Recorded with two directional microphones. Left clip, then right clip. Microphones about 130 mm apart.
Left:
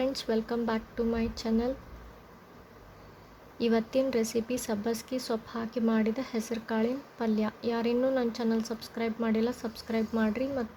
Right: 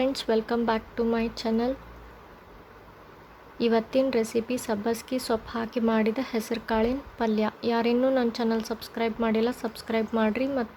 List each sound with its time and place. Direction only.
0.0 s speech: 20° right (ahead or behind)
3.6 s speech: 10° right (ahead or behind)